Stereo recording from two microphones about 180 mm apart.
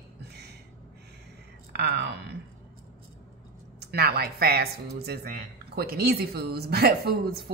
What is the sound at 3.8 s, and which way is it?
Speech, 60° right (ahead or behind).